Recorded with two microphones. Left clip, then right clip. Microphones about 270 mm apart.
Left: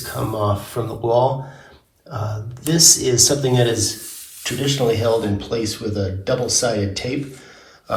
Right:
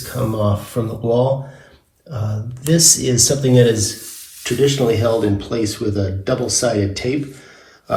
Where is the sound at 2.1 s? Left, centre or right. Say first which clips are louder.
Left 1 dB; centre.